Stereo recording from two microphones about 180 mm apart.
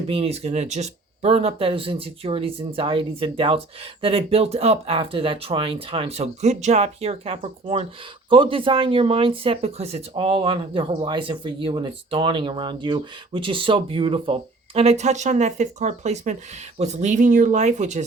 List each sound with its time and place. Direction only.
0.1 s speech: 35° right (ahead or behind)